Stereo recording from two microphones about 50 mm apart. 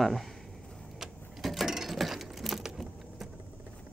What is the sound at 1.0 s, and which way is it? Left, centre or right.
Sewing machine, centre.